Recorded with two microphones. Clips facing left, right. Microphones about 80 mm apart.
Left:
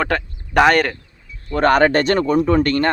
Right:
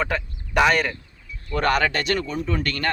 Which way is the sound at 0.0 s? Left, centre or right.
Left.